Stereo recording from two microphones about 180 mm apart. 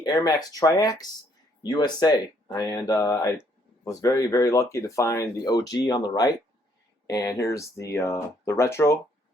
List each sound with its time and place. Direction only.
0.0 s speech: 20° left (ahead or behind)